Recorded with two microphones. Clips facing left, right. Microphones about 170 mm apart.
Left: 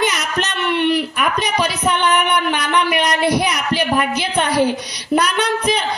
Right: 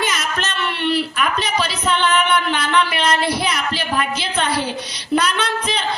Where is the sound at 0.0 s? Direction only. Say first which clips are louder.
Left 3 dB; 15° left (ahead or behind).